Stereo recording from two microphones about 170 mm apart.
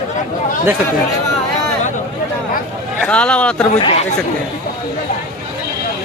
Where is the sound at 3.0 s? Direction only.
5° left (ahead or behind).